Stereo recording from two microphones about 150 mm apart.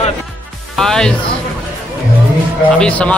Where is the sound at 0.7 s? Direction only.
5° left (ahead or behind).